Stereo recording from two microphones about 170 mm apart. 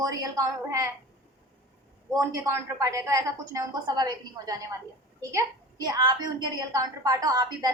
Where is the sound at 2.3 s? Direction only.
15° right (ahead or behind).